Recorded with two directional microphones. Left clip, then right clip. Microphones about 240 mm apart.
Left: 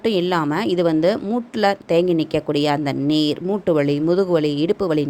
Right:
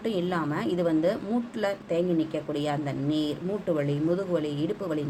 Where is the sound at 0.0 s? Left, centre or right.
Left.